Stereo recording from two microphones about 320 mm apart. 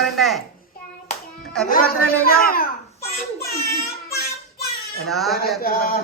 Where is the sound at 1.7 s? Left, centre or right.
Left.